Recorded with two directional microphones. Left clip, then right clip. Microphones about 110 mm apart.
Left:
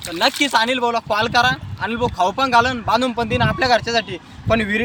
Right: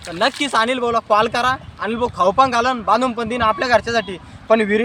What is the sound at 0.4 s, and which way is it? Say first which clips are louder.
Speech: even; 25° right (ahead or behind).